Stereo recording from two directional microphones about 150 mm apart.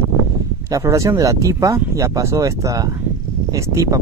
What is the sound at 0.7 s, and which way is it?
Speech, 20° right (ahead or behind).